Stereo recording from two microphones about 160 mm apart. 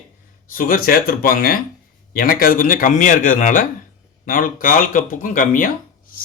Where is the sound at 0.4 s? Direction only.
65° left (ahead or behind).